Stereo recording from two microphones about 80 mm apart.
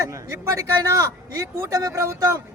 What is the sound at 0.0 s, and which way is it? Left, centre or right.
A man's voice, right.